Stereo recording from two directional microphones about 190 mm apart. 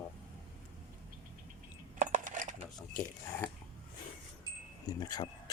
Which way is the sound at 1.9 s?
40° right (ahead or behind).